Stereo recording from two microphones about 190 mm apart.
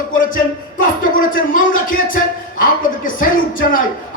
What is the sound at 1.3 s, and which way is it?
Speech, 45° left (ahead or behind).